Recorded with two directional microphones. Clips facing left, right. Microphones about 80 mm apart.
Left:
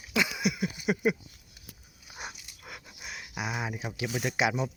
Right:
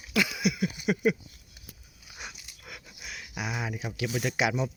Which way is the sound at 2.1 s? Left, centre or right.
Left.